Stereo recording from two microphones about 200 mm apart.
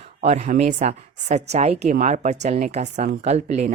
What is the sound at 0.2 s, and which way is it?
Speech, 35° right (ahead or behind).